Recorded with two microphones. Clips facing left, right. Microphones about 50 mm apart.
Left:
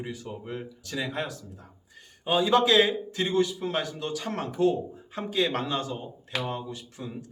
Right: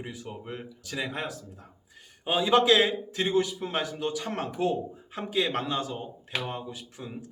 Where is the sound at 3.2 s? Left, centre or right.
Centre.